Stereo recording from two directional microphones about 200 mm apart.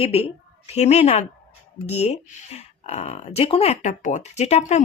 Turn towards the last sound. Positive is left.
turn(degrees=35)  # may be behind; listen again after turning